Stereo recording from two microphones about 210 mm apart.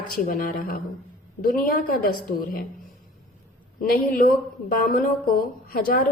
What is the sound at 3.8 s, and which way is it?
A woman's voice, 40° left (ahead or behind).